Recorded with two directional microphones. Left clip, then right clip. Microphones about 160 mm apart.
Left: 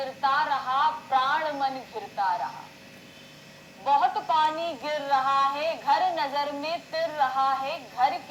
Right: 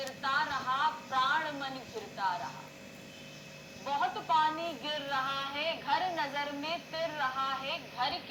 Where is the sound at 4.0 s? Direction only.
20° right (ahead or behind).